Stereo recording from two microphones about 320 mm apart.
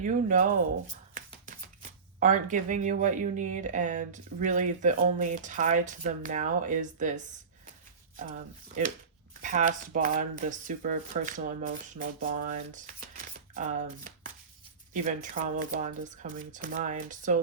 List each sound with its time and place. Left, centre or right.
0.0 s speech: right
1.1 s hands: right
2.1 s speech: right
8.1 s speech: right